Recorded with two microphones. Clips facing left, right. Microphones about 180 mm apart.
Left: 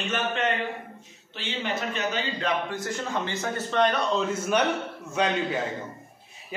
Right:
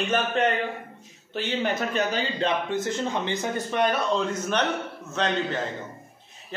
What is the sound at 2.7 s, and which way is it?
A man's voice, 20° right (ahead or behind).